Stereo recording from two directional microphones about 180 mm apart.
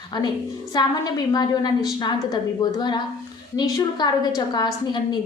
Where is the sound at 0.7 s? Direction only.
25° left (ahead or behind).